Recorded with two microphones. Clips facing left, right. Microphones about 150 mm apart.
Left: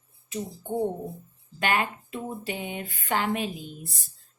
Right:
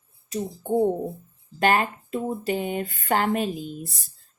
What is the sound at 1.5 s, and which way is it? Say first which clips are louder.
A woman's voice: right 5 dB; 40° right (ahead or behind).